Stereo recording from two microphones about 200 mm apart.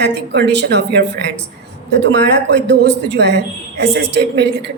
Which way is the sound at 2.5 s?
60° right (ahead or behind).